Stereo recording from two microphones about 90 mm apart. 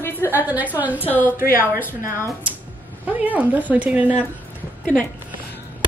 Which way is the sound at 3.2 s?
15° right (ahead or behind).